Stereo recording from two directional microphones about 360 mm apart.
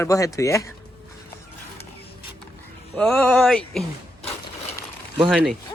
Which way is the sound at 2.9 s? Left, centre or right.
Centre.